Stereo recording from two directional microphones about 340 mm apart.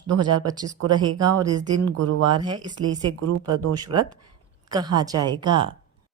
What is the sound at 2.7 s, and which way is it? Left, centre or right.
Speech, right.